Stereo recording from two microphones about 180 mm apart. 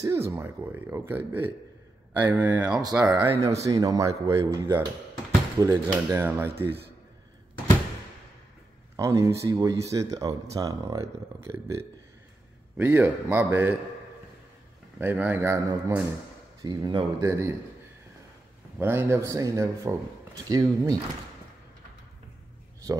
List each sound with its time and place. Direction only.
0.0 s speech: 15° right (ahead or behind)
2.8 s speech: 20° right (ahead or behind)
8.9 s speech: 15° right (ahead or behind)
15.0 s speech: 10° right (ahead or behind)
18.8 s speech: 15° right (ahead or behind)